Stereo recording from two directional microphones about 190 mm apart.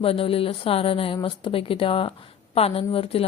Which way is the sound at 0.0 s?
30° left (ahead or behind).